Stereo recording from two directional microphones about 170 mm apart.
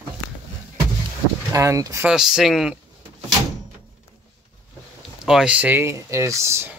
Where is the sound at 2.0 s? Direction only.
Centre (ahead or behind).